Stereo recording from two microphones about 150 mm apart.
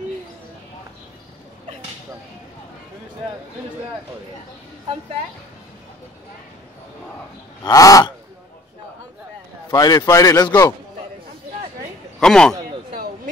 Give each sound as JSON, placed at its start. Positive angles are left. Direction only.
{"t": 7.6, "sound": "a man's voice", "side_deg": 25}
{"t": 9.7, "sound": "a man's voice", "side_deg": 25}
{"t": 12.2, "sound": "a man's voice", "side_deg": 5}
{"t": 12.9, "sound": "a sound", "side_deg": -85}